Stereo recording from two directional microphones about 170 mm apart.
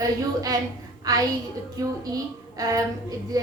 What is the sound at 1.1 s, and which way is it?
Speech, 20° right (ahead or behind).